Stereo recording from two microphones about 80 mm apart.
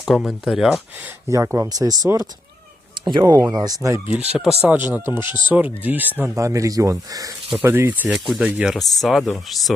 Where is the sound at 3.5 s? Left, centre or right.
Right.